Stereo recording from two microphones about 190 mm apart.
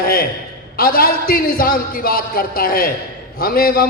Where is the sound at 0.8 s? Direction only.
50° left (ahead or behind).